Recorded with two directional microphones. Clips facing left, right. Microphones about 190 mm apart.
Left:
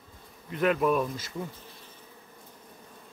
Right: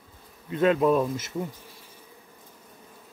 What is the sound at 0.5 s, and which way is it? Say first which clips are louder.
Speech: right 4 dB; 25° right (ahead or behind).